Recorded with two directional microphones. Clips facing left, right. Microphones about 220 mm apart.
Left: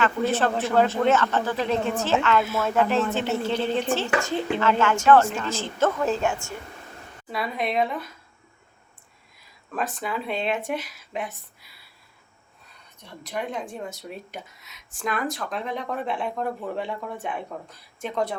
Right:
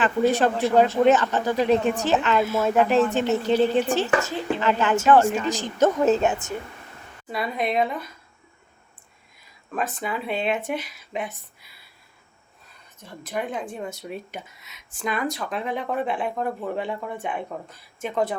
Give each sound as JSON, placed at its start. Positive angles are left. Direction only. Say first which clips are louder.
{"t": 0.0, "sound": "speech", "louder": "right 3 dB", "side_deg": -15}
{"t": 7.3, "sound": "speech", "louder": "right 2 dB", "side_deg": 0}
{"t": 9.7, "sound": "speech", "louder": "right 1 dB", "side_deg": 0}
{"t": 13.0, "sound": "speech", "louder": "right 2 dB", "side_deg": -5}